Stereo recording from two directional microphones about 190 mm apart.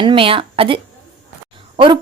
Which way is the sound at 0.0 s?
25° right (ahead or behind).